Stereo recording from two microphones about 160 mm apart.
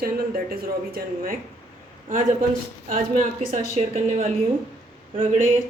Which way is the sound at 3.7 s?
45° right (ahead or behind).